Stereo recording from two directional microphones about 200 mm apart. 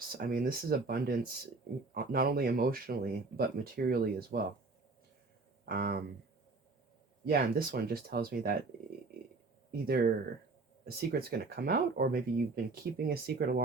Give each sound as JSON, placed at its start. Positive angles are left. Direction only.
{"t": 0.0, "sound": "speech", "side_deg": -45}
{"t": 5.6, "sound": "speech", "side_deg": -50}
{"t": 7.3, "sound": "speech", "side_deg": -50}
{"t": 9.8, "sound": "speech", "side_deg": -50}